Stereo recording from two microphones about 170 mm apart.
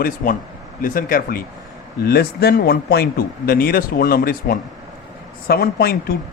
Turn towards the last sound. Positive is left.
turn(degrees=65)  # may be behind; listen again after turning